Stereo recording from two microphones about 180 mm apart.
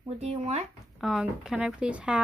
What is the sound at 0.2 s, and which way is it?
Speech, 35° right (ahead or behind).